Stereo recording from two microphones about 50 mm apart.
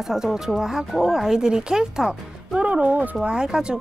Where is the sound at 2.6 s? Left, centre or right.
Right.